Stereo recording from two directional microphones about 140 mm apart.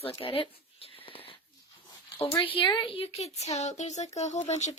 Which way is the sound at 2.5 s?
35° left (ahead or behind).